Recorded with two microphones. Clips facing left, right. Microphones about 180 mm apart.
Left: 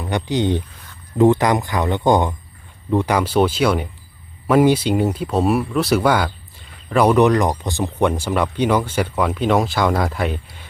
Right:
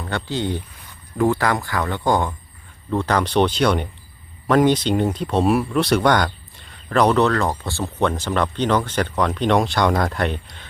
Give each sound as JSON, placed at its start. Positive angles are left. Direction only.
{"t": 0.0, "sound": "speech", "side_deg": 15}